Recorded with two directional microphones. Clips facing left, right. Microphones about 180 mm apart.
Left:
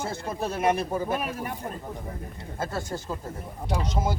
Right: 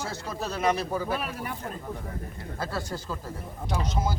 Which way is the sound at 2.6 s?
25° left (ahead or behind).